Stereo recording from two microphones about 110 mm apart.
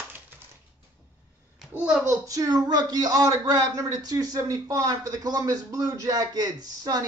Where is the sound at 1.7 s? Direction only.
10° right (ahead or behind).